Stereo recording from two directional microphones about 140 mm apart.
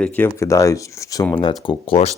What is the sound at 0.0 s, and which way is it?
Speech, 15° left (ahead or behind).